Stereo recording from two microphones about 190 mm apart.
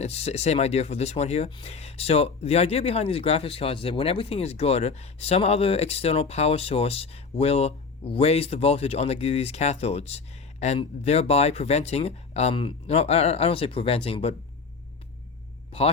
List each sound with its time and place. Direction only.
0.0 s speech: 35° left (ahead or behind)